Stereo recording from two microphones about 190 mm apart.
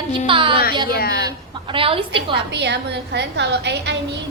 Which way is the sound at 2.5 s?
65° right (ahead or behind).